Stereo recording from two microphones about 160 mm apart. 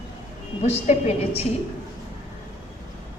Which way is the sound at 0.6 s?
40° left (ahead or behind).